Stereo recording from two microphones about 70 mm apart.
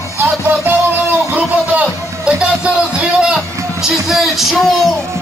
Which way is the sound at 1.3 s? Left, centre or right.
Right.